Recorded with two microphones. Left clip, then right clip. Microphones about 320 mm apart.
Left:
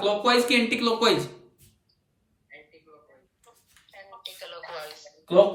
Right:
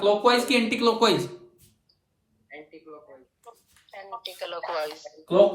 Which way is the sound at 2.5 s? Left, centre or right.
Centre.